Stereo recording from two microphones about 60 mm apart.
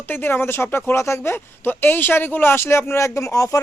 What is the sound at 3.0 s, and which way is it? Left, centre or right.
Speech, left.